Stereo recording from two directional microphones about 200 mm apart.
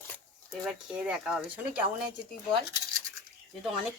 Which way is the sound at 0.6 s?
5° right (ahead or behind).